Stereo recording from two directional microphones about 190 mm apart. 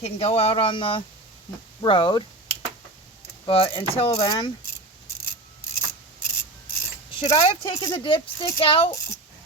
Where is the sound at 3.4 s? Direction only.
30° left (ahead or behind).